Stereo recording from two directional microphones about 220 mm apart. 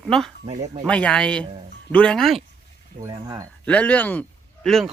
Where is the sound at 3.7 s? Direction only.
5° left (ahead or behind).